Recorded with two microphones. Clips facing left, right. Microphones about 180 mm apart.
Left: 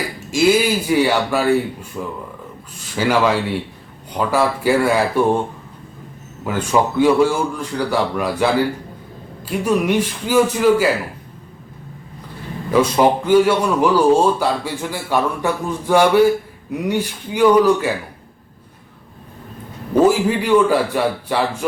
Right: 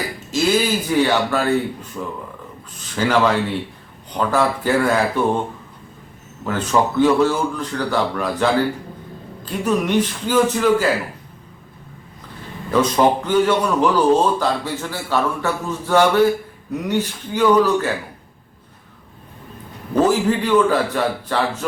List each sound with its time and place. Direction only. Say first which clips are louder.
0.3 s a man's voice: left 3 dB; 10° left (ahead or behind)
6.4 s a man's voice: left 1 dB; 10° left (ahead or behind)
12.7 s a man's voice: left 1 dB; 10° left (ahead or behind)
20.0 s a man's voice: left 2 dB; 10° left (ahead or behind)